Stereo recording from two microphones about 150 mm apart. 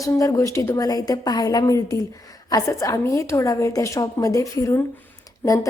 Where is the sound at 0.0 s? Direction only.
20° left (ahead or behind).